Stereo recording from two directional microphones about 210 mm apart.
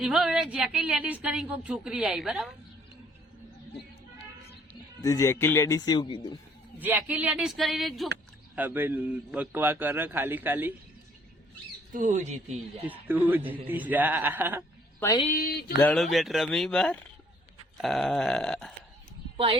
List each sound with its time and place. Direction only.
0.0 s a woman's voice: 5° right (ahead or behind)
4.7 s speech: 15° left (ahead or behind)
6.7 s a woman's voice: 10° right (ahead or behind)
11.9 s speech: 35° right (ahead or behind)
12.8 s a man's voice: 10° right (ahead or behind)
15.3 s speech: 45° left (ahead or behind)
15.8 s a woman's voice: 5° left (ahead or behind)